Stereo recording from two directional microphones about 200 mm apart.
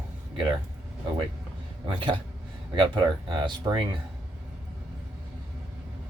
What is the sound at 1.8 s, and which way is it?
Speech, 25° right (ahead or behind).